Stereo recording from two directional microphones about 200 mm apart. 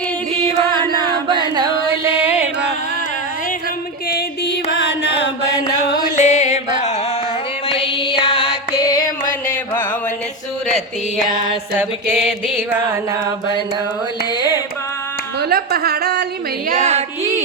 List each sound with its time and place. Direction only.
1.3 s singing: 20° right (ahead or behind)
4.7 s mantra: 60° left (ahead or behind)
6.1 s music: 35° left (ahead or behind)
9.0 s a sound: 40° left (ahead or behind)
15.4 s a sound: 50° right (ahead or behind)
16.6 s female singing: 35° right (ahead or behind)